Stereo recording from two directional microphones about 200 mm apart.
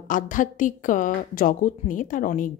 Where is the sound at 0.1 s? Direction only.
40° left (ahead or behind).